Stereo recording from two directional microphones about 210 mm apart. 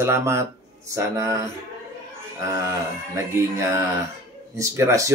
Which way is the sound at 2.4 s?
15° right (ahead or behind).